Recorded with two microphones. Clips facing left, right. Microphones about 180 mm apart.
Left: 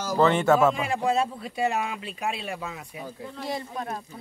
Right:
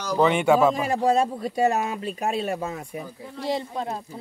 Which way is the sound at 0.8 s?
40° right (ahead or behind).